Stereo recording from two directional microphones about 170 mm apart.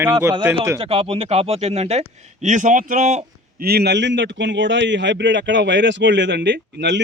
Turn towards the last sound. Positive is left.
turn(degrees=-90)